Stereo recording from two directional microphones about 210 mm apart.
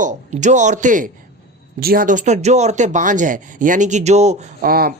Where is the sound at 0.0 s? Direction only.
35° right (ahead or behind).